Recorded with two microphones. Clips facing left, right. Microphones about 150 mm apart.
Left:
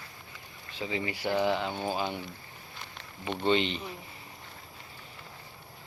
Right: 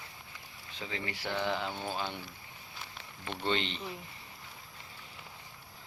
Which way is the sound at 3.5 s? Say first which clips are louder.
Left 6 dB; 10° left (ahead or behind).